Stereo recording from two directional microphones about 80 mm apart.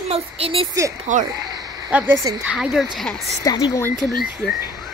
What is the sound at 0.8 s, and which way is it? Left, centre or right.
Speech, right.